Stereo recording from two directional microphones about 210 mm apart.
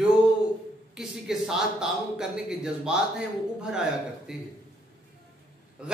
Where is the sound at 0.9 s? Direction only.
Centre (ahead or behind).